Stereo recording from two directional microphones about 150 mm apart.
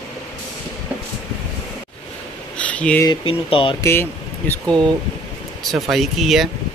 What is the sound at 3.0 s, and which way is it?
Speech, 35° left (ahead or behind).